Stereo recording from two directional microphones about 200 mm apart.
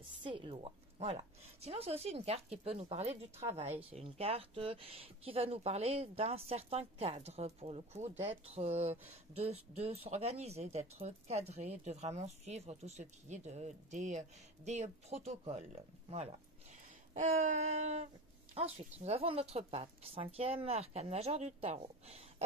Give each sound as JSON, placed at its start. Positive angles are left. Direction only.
{"t": 0.2, "sound": "a woman's voice", "side_deg": -25}